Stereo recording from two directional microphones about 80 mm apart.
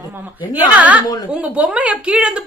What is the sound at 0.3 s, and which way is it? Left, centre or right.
A woman's voice, centre.